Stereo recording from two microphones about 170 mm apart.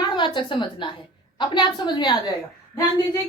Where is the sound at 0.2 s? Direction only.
30° left (ahead or behind).